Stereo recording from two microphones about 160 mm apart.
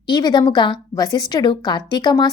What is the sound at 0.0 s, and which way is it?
A woman's voice, 25° left (ahead or behind).